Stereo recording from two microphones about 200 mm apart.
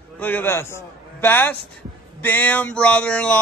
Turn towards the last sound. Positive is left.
turn(degrees=5)  # may be behind; listen again after turning